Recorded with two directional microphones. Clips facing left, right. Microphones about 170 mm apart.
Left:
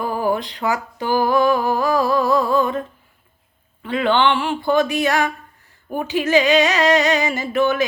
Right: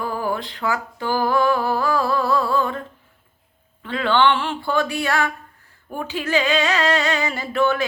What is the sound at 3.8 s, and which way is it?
Music, 15° left (ahead or behind).